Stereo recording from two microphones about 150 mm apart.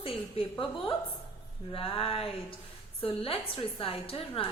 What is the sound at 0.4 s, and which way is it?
Speech, 40° left (ahead or behind).